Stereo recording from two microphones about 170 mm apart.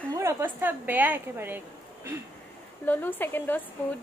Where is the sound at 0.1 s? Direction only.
15° right (ahead or behind).